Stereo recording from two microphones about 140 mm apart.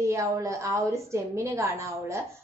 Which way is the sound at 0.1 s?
20° right (ahead or behind).